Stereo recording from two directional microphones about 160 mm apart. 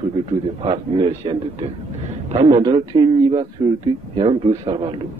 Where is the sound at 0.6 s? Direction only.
30° right (ahead or behind).